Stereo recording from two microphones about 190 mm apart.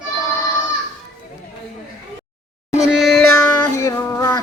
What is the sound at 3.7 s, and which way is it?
Music, 15° left (ahead or behind).